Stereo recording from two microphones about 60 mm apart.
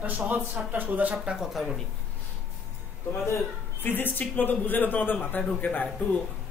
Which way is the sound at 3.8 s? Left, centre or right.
Left.